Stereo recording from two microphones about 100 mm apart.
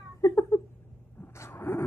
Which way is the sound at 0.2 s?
30° left (ahead or behind).